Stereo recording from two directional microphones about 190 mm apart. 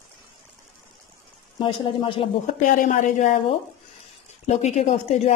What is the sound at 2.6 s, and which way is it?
A woman's voice, 45° left (ahead or behind).